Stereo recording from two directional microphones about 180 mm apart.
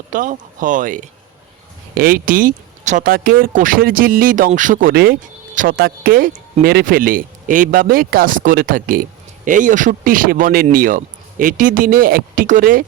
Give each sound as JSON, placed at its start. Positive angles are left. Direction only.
{"t": 0.1, "sound": "speech", "side_deg": -50}